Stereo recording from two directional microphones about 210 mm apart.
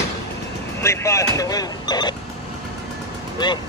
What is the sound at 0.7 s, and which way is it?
Speech, 15° left (ahead or behind).